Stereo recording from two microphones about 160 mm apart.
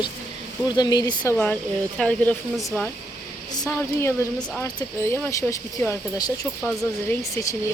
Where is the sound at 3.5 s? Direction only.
20° left (ahead or behind).